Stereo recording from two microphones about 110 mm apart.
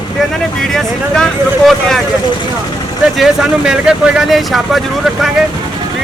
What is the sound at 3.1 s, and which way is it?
Speech, 5° right (ahead or behind).